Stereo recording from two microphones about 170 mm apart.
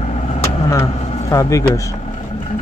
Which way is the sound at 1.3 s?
20° left (ahead or behind).